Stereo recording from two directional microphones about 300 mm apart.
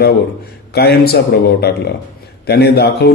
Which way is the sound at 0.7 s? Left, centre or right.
Left.